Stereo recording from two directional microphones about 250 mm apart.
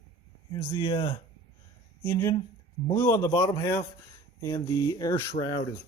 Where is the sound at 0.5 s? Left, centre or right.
Centre.